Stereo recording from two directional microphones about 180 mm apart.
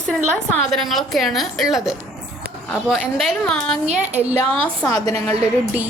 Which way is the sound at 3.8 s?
40° right (ahead or behind).